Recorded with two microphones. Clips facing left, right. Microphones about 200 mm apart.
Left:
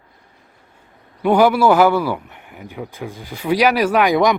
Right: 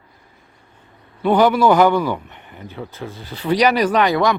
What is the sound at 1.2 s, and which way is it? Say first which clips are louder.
A man's voice: left 1 dB; 10° left (ahead or behind).